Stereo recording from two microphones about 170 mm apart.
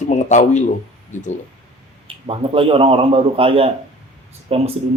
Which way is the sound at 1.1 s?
45° left (ahead or behind).